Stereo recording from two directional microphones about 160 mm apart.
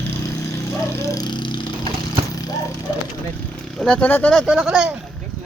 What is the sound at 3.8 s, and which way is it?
Speech, 10° left (ahead or behind).